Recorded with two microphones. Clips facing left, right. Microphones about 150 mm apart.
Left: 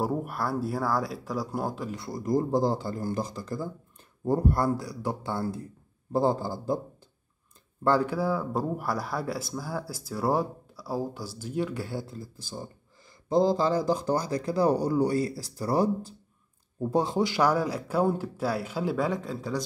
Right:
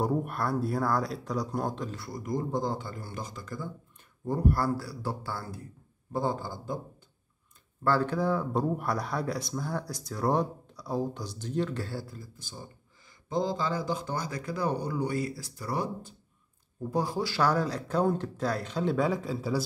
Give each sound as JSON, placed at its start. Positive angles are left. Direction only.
{"t": 0.0, "sound": "speech", "side_deg": 5}
{"t": 2.0, "sound": "speech", "side_deg": 25}
{"t": 4.3, "sound": "a man's voice", "side_deg": 25}
{"t": 7.8, "sound": "speech", "side_deg": 15}
{"t": 16.9, "sound": "speech", "side_deg": 25}